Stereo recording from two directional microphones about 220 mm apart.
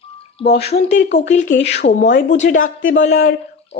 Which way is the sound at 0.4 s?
25° left (ahead or behind).